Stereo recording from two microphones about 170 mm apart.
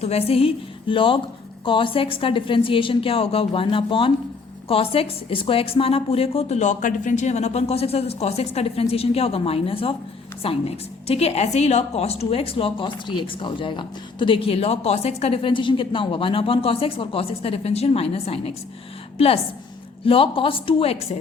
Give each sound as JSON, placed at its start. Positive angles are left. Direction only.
{"t": 0.0, "sound": "a woman's voice", "side_deg": 35}